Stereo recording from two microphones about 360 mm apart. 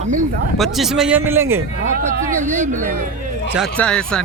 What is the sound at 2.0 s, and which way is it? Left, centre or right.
Speech, right.